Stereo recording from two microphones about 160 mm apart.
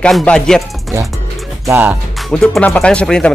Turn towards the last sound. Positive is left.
turn(degrees=5)  # may be behind; listen again after turning